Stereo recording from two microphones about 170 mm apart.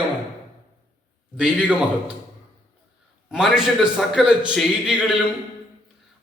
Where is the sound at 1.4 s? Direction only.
5° right (ahead or behind).